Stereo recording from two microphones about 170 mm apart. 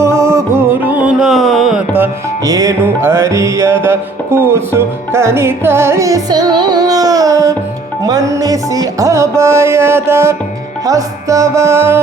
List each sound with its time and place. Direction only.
0.0 s music: 15° right (ahead or behind); by 1.8 s centre (ahead or behind)
2.0 s music: 20° right (ahead or behind)